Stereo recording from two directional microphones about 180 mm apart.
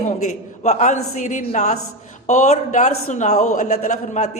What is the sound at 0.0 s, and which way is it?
A man's voice, 40° left (ahead or behind).